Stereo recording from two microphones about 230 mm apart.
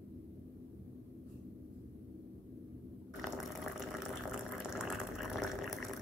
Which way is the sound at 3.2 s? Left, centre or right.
Centre.